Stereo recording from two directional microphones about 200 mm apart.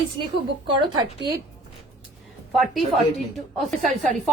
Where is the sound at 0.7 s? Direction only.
25° right (ahead or behind).